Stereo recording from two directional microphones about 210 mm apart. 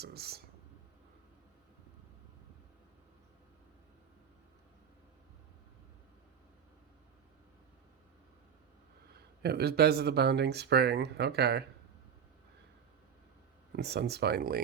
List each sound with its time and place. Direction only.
0.0 s speech: 50° right (ahead or behind)
9.1 s speech: 50° right (ahead or behind)
13.7 s speech: 50° right (ahead or behind)